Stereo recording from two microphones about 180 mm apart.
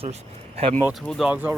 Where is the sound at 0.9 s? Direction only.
Centre (ahead or behind).